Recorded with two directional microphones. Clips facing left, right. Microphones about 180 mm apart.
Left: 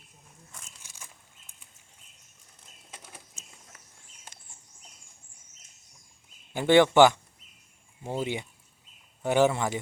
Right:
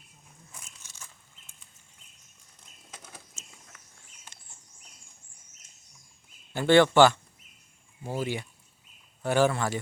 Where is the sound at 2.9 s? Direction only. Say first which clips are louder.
Even; 10° left (ahead or behind).